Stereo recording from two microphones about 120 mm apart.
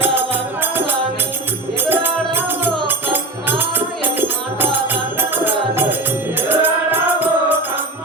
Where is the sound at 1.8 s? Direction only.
15° right (ahead or behind).